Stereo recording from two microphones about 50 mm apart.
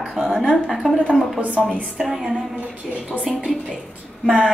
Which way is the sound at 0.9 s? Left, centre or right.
Centre.